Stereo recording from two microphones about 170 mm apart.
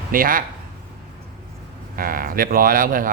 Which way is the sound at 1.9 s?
55° right (ahead or behind).